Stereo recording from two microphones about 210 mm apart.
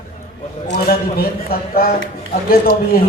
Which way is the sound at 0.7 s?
45° left (ahead or behind).